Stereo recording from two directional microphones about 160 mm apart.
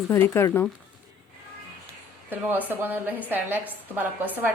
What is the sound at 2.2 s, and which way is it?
A woman's voice, 10° right (ahead or behind).